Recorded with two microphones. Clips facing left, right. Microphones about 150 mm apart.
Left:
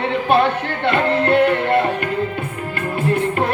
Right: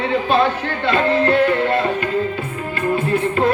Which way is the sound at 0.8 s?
60° left (ahead or behind).